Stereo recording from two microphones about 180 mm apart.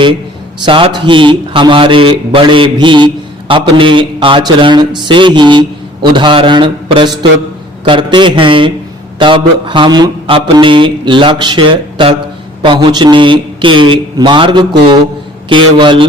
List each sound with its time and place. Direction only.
0.6 s speech: 25° right (ahead or behind)